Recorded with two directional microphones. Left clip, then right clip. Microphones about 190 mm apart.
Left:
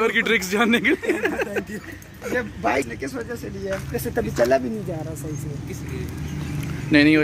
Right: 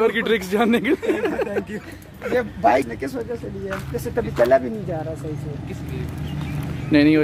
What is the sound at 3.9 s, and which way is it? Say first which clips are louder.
Speech: right 2 dB; 45° left (ahead or behind).